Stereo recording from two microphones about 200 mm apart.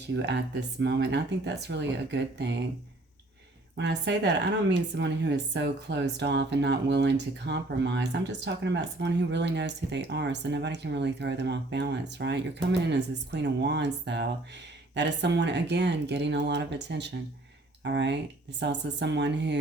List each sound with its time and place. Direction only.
0.2 s speech: 60° right (ahead or behind)
3.8 s speech: 60° right (ahead or behind)